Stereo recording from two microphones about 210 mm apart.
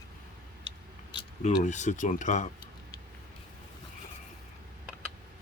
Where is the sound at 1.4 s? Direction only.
35° left (ahead or behind).